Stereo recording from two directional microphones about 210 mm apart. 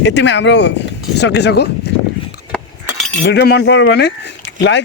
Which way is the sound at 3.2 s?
55° left (ahead or behind).